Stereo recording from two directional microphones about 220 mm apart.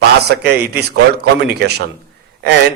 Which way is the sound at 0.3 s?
50° right (ahead or behind).